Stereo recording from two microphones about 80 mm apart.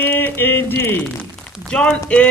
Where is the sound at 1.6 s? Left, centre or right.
Centre.